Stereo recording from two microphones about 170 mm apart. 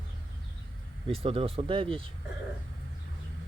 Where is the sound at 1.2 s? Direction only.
35° right (ahead or behind).